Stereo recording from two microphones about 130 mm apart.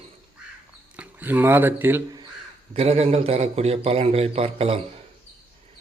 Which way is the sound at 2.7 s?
50° right (ahead or behind).